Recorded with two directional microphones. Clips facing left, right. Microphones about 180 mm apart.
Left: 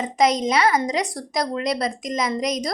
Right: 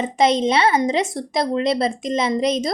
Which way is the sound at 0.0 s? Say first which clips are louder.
Right 2 dB; 25° right (ahead or behind).